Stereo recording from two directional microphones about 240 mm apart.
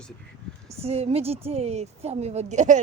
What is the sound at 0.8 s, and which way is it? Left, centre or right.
Speech, right.